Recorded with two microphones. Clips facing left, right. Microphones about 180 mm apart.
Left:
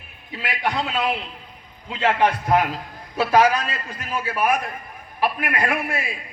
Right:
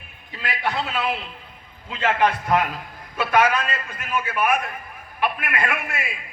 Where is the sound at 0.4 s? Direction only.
20° left (ahead or behind).